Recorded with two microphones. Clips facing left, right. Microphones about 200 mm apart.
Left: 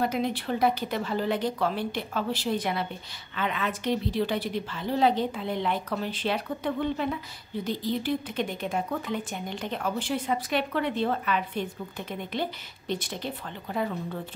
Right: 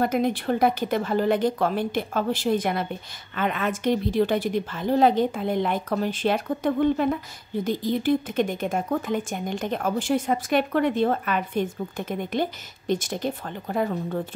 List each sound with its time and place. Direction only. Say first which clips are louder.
0.0 s a woman's voice: right 5 dB; 50° right (ahead or behind)